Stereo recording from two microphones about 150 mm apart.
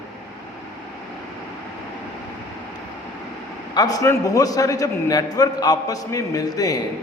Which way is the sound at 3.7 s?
25° left (ahead or behind).